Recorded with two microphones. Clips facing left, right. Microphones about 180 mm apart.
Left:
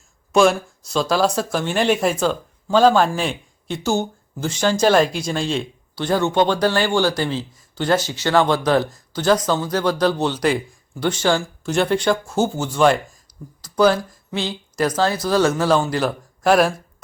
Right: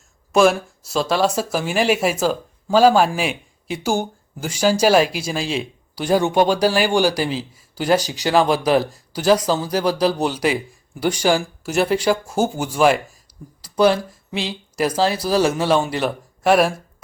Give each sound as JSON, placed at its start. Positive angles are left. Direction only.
{"t": 0.3, "sound": "speech", "side_deg": -5}
{"t": 13.2, "sound": "a sound", "side_deg": -30}
{"t": 14.9, "sound": "speech", "side_deg": -30}
{"t": 15.5, "sound": "speech", "side_deg": -5}